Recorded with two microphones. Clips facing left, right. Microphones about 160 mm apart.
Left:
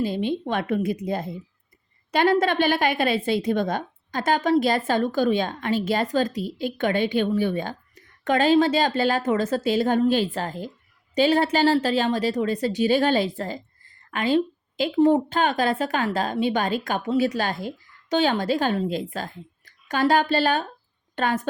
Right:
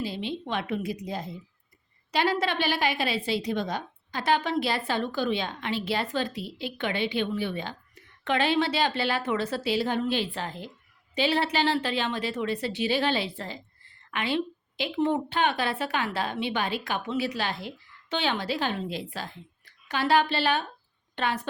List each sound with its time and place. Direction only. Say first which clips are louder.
0.0 s a woman's voice: left 7 dB; 50° left (ahead or behind)